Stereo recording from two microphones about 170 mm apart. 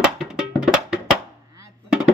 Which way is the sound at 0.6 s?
5° right (ahead or behind).